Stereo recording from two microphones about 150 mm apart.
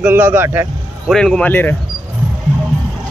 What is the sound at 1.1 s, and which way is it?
Speech, 5° left (ahead or behind).